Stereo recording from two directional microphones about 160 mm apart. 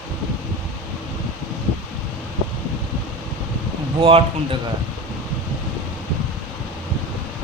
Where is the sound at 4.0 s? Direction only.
35° right (ahead or behind).